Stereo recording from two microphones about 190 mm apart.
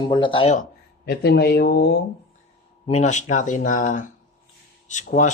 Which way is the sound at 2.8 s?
40° left (ahead or behind).